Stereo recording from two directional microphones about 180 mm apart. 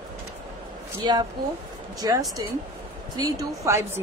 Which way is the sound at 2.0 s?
20° right (ahead or behind).